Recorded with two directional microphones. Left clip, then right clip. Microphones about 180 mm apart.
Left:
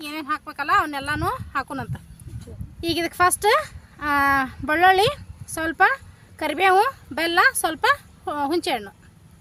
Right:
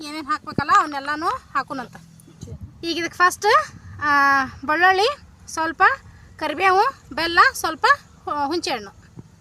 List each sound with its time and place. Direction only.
0.0 s speech: 10° left (ahead or behind); by 8.9 s 25° left (ahead or behind)